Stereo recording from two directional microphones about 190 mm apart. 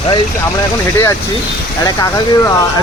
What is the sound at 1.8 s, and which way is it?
Speech, 20° left (ahead or behind).